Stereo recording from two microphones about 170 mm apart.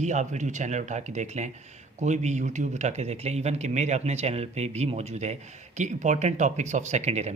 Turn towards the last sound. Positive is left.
turn(degrees=-40)  # may be behind; listen again after turning